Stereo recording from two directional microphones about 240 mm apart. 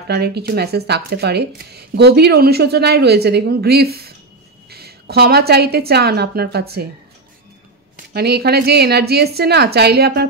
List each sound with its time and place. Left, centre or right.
0.1 s a woman's voice: right
8.1 s a woman's voice: right